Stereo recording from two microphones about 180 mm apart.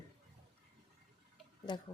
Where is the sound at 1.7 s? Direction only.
25° left (ahead or behind).